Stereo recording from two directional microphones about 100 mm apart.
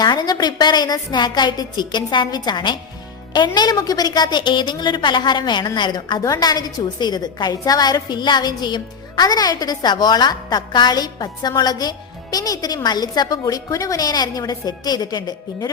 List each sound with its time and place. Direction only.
0.0 s a woman's voice: 45° left (ahead or behind)